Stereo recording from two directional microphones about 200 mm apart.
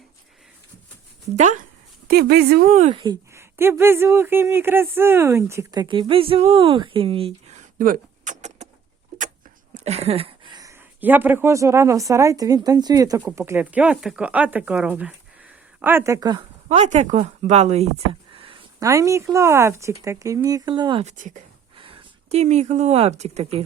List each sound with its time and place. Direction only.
1.4 s speech: 40° right (ahead or behind)
2.0 s a woman's voice: 50° right (ahead or behind)
2.9 s speech: 20° right (ahead or behind)
7.8 s vehicle: 45° right (ahead or behind)
9.8 s speech: 30° right (ahead or behind)
16.6 s speech: 35° right (ahead or behind)
18.9 s speech: 15° right (ahead or behind)
21.0 s speech: 40° right (ahead or behind)